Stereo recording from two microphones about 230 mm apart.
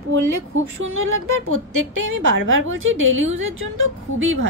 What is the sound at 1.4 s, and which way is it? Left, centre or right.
A woman's voice, right.